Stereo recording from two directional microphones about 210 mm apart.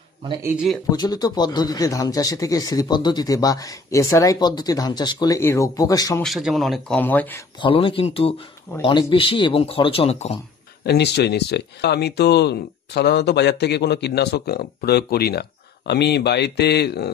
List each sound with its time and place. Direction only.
0.9 s speech: 20° left (ahead or behind)
6.2 s speech: centre (ahead or behind)
7.6 s speech: 25° left (ahead or behind)
10.9 s speech: 50° left (ahead or behind)